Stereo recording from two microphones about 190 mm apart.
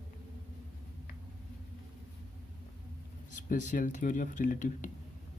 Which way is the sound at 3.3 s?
40° left (ahead or behind).